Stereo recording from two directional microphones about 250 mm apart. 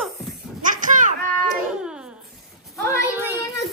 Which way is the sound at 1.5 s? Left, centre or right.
Centre.